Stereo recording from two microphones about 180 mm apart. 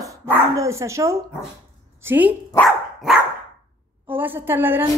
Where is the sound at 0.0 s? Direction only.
15° right (ahead or behind).